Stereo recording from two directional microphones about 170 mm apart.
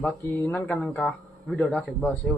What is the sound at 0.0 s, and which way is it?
Speech, 10° left (ahead or behind).